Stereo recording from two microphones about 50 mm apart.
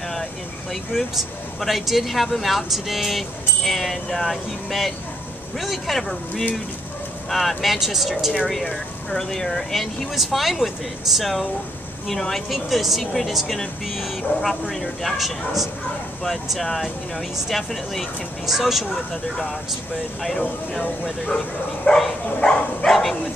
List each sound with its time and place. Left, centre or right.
0.1 s speech: centre
20.2 s speech: centre
21.8 s bow-wow: centre
22.5 s dog: centre